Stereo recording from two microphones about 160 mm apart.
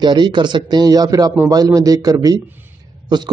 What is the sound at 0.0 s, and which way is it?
A man's voice, 30° right (ahead or behind).